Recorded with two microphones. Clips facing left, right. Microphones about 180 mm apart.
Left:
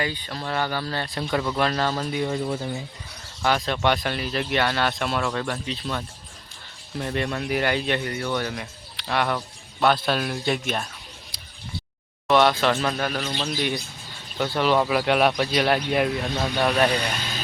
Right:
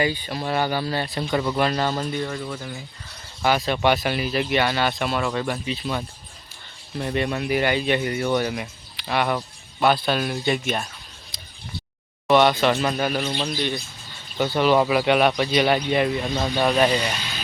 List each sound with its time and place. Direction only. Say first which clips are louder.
0.0 s speech: right 5 dB; 10° right (ahead or behind)
2.4 s speech: left 4 dB; 30° left (ahead or behind)
3.4 s speech: right 2 dB; 5° right (ahead or behind)
12.3 s speech: right 2 dB; centre (ahead or behind)
13.4 s speech: right 1 dB; 5° left (ahead or behind)